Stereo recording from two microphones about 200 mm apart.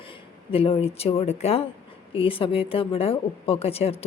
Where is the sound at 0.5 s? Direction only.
30° left (ahead or behind).